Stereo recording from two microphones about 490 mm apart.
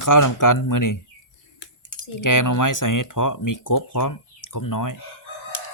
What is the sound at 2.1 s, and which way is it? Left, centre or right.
Speech, left.